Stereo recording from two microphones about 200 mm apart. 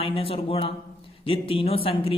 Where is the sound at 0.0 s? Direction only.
25° left (ahead or behind).